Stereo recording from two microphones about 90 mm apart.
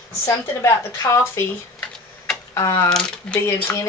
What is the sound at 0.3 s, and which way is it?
Speech, 35° left (ahead or behind).